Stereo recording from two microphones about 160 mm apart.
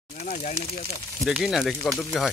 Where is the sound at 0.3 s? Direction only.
50° left (ahead or behind).